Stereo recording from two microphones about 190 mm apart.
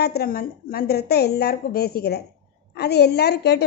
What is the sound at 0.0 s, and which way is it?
A woman's voice, 55° left (ahead or behind).